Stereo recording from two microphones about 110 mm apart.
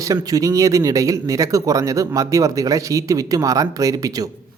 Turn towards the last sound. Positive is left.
turn(degrees=-30)  # may be behind; listen again after turning